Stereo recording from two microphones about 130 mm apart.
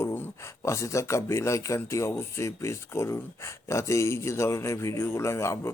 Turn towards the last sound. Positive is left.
turn(degrees=20)  # may be behind; listen again after turning